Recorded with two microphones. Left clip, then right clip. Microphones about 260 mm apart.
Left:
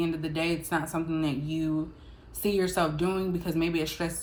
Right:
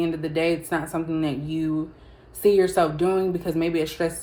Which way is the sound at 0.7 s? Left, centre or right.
Centre.